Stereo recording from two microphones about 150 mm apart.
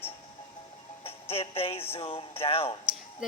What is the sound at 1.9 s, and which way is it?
Speech, 40° left (ahead or behind).